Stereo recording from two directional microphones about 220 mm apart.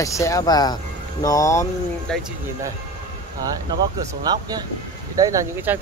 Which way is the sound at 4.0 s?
15° right (ahead or behind).